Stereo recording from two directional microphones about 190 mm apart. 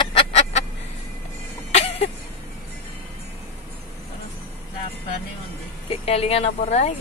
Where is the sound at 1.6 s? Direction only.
35° left (ahead or behind).